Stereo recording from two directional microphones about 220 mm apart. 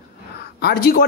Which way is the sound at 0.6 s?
45° left (ahead or behind).